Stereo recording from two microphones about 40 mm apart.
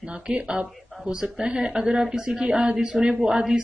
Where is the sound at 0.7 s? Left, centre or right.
Centre.